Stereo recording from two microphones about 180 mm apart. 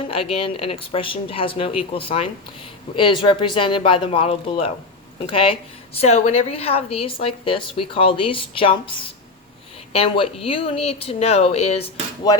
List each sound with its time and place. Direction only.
0.0 s a woman's voice: 30° left (ahead or behind)
9.9 s a woman's voice: 30° left (ahead or behind)